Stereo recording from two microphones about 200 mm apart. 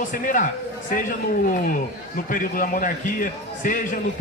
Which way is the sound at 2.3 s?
45° left (ahead or behind).